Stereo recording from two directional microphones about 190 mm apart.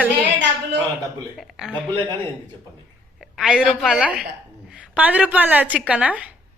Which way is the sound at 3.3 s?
5° right (ahead or behind).